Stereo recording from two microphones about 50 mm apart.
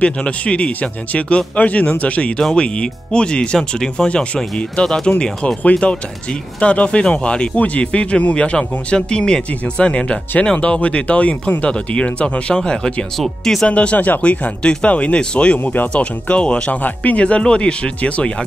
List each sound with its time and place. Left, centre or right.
0.0 s speech: left
13.2 s speech: centre
13.7 s speech: left
15.6 s speech: left
15.9 s speech: left